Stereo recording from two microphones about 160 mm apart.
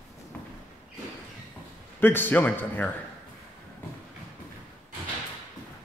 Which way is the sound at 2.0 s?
10° left (ahead or behind).